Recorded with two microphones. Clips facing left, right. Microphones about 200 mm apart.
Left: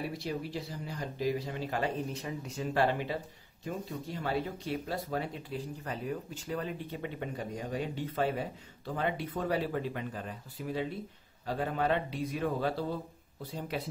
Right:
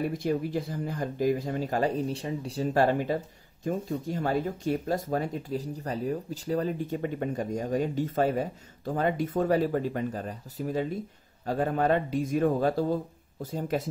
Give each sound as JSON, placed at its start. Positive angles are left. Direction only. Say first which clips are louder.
{"t": 0.1, "sound": "speech", "louder": "right 8 dB", "side_deg": -50}